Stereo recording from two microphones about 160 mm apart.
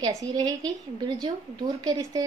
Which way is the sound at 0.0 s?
25° right (ahead or behind).